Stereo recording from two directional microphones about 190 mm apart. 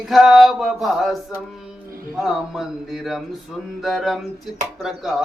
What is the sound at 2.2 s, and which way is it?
Music, centre (ahead or behind).